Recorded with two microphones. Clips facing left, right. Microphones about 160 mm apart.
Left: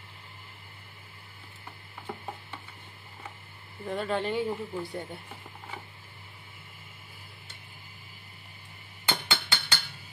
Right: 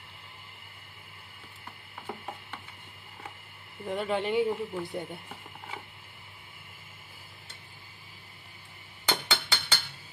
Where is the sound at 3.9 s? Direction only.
20° right (ahead or behind).